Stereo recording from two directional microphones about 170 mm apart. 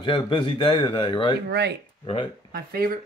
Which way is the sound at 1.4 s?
75° right (ahead or behind).